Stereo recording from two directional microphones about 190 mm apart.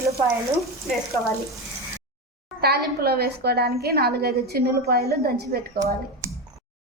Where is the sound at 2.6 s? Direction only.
55° right (ahead or behind).